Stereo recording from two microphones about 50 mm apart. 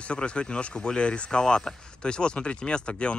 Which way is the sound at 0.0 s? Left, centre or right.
Left.